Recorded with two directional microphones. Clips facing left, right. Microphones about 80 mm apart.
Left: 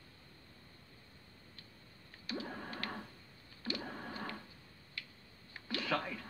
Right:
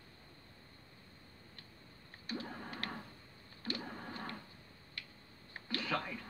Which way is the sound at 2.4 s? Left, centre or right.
Centre.